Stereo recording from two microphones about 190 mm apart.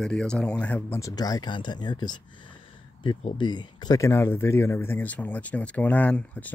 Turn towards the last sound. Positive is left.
turn(degrees=10)  # may be behind; listen again after turning